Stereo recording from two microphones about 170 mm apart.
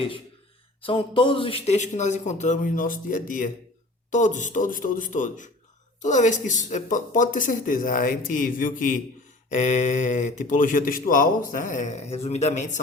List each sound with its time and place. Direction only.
0.8 s speech: 30° left (ahead or behind)